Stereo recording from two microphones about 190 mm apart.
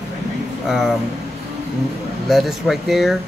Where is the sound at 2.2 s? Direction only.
Centre (ahead or behind).